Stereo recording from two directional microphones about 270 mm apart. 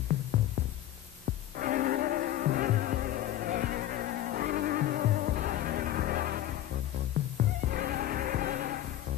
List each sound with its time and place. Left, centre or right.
1.6 s music: right
7.6 s music: right